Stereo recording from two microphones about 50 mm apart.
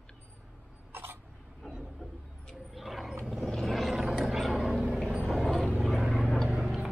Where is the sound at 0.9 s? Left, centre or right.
Right.